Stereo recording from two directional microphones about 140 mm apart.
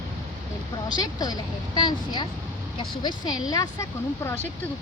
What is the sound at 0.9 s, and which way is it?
A woman's voice, 30° left (ahead or behind).